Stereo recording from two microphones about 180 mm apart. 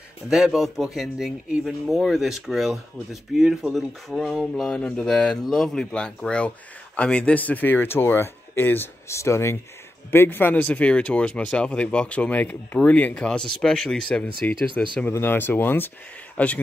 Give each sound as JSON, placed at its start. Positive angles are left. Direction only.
{"t": 0.3, "sound": "speech", "side_deg": 0}